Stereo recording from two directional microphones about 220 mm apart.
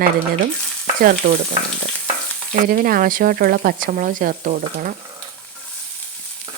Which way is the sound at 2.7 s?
40° right (ahead or behind).